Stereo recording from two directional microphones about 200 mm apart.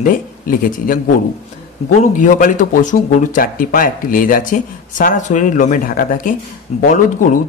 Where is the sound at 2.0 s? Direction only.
40° left (ahead or behind).